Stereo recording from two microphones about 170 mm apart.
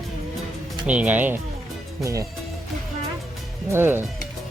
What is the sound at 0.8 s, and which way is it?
Speech, 10° right (ahead or behind).